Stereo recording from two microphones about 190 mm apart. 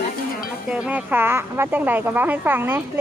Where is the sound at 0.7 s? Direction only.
5° right (ahead or behind).